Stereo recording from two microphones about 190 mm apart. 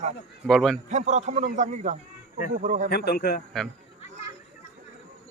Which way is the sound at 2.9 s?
55° left (ahead or behind).